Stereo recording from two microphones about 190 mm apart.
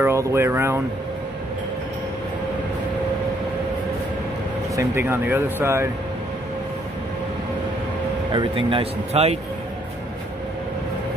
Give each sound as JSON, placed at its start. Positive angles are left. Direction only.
{"t": 0.0, "sound": "speech", "side_deg": -15}
{"t": 4.7, "sound": "speech", "side_deg": -15}
{"t": 8.3, "sound": "speech", "side_deg": -25}